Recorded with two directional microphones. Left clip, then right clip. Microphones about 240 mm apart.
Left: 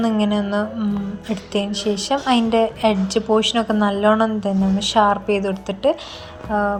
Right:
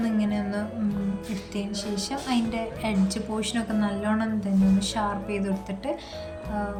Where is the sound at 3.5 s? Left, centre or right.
Left.